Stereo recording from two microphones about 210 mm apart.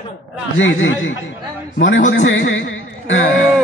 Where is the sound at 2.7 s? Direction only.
60° left (ahead or behind).